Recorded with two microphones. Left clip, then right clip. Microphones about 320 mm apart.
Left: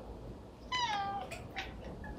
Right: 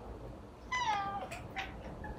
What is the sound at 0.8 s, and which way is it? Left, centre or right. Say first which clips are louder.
Cat: right 1 dB; centre.